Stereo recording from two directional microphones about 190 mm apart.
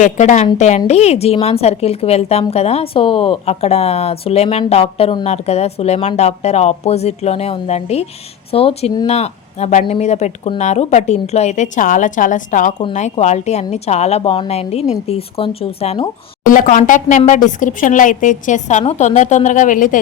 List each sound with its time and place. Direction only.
0.0 s a woman's voice: 40° left (ahead or behind)
16.5 s speech: 45° left (ahead or behind)